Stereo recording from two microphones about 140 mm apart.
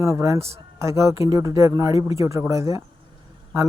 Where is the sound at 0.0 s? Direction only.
20° right (ahead or behind).